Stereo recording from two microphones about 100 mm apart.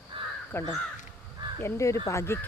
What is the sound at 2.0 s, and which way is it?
Cricket, 25° left (ahead or behind).